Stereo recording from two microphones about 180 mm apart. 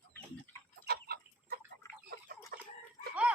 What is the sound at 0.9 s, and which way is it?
Chicken, 60° right (ahead or behind).